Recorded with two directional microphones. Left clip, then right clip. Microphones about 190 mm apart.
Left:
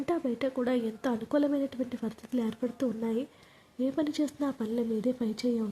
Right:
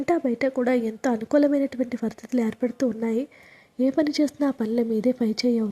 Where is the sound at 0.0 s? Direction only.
25° right (ahead or behind).